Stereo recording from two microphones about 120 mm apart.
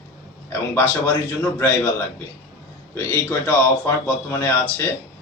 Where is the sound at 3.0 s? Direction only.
20° left (ahead or behind).